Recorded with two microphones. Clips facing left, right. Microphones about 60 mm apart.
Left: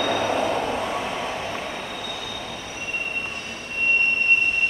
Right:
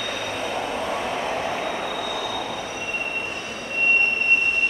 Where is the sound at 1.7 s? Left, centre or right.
Right.